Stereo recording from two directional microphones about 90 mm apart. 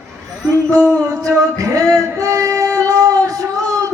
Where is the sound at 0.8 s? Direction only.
35° right (ahead or behind).